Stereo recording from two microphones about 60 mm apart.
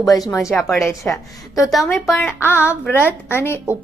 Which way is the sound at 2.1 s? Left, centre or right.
Left.